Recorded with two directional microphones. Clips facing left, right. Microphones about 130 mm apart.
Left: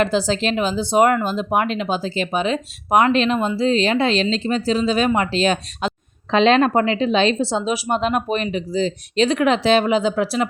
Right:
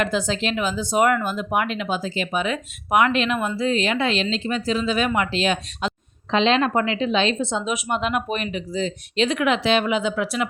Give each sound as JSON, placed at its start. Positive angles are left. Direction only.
{"t": 0.0, "sound": "speech", "side_deg": 35}